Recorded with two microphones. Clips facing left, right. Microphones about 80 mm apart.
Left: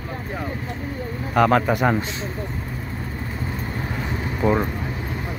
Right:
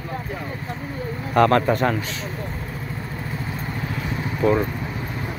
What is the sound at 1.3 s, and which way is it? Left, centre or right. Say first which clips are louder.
Speech: right 1 dB; centre.